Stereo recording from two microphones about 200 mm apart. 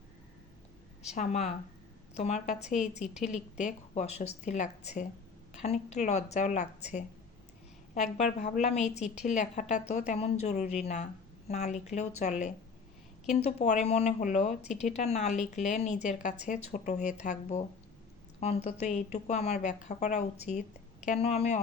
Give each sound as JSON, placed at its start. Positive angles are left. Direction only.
{"t": 1.0, "sound": "speech", "side_deg": 35}